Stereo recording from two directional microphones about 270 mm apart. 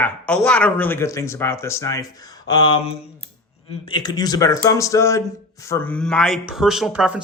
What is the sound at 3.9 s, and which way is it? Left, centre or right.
Speech, centre.